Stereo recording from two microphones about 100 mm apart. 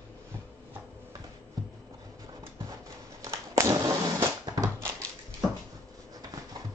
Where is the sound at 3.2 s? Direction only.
30° right (ahead or behind).